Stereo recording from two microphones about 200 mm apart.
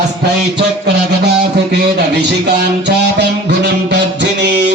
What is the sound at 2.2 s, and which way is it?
Music, 55° right (ahead or behind).